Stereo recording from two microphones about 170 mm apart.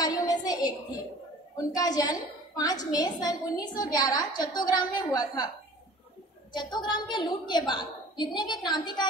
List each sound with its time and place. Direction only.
0.0 s a sound: 25° left (ahead or behind)
1.8 s a woman's voice: 20° left (ahead or behind)
6.5 s a woman's voice: 25° left (ahead or behind)